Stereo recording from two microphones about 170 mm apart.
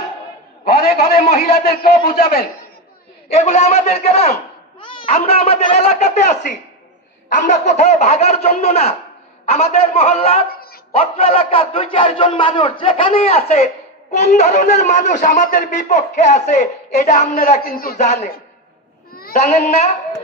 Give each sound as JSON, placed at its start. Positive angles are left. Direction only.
{"t": 0.7, "sound": "a man's voice", "side_deg": 60}
{"t": 3.3, "sound": "a man's voice", "side_deg": 45}
{"t": 10.5, "sound": "a sound", "side_deg": 60}
{"t": 10.9, "sound": "speech", "side_deg": 35}
{"t": 19.3, "sound": "speech", "side_deg": 40}